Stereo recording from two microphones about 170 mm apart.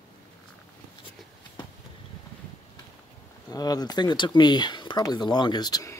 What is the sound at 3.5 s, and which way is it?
Speech, 20° left (ahead or behind).